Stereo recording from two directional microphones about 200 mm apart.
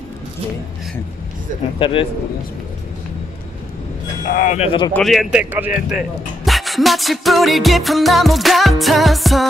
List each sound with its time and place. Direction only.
1.8 s a man's voice: 25° left (ahead or behind)
4.3 s speech: 40° left (ahead or behind)
4.9 s speech: centre (ahead or behind)